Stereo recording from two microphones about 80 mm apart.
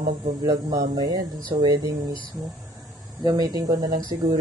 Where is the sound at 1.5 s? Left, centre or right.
Right.